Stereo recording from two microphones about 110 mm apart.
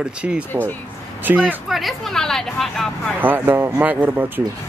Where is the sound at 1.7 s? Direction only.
Centre (ahead or behind).